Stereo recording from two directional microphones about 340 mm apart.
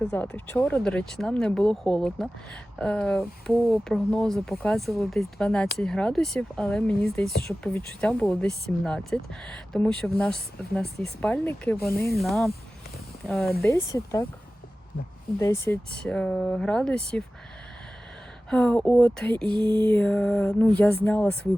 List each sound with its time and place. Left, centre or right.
0.0 s speech: centre
15.4 s speech: centre
18.5 s speech: centre
19.5 s speech: centre
19.7 s speech: centre